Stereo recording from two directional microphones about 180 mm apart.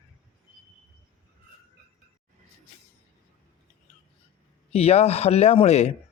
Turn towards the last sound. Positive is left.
turn(degrees=40)  # may be behind; listen again after turning